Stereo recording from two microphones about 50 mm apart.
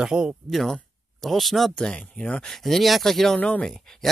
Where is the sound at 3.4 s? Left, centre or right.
Centre.